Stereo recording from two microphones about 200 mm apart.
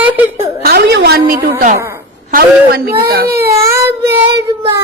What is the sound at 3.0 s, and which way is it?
Speech, 50° right (ahead or behind).